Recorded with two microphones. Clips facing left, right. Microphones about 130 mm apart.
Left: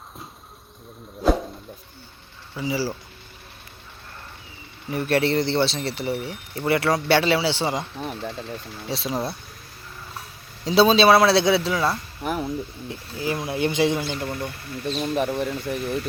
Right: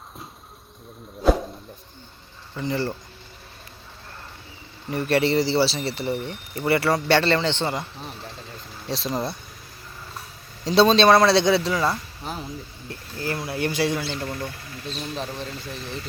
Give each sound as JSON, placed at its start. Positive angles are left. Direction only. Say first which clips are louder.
{"t": 1.2, "sound": "a sound", "louder": "right 1 dB", "side_deg": 0}
{"t": 2.6, "sound": "speech", "louder": "even", "side_deg": 5}
{"t": 4.9, "sound": "speech", "louder": "even", "side_deg": 0}
{"t": 8.0, "sound": "speech", "louder": "left 7 dB", "side_deg": 90}
{"t": 8.9, "sound": "speech", "louder": "even", "side_deg": 0}
{"t": 10.6, "sound": "speech", "louder": "even", "side_deg": 0}
{"t": 12.2, "sound": "speech", "louder": "left 7 dB", "side_deg": 60}
{"t": 12.9, "sound": "speech", "louder": "left 1 dB", "side_deg": 15}
{"t": 15.0, "sound": "speech", "louder": "left 8 dB", "side_deg": 55}